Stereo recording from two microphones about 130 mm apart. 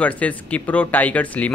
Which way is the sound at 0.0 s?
10° left (ahead or behind).